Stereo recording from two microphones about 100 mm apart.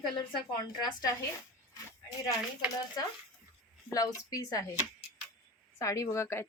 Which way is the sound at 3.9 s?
40° left (ahead or behind).